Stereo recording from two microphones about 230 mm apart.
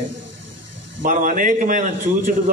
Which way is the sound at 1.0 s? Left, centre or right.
Right.